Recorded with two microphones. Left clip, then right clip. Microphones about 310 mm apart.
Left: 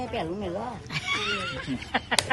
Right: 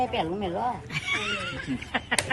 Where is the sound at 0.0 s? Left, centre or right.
Centre.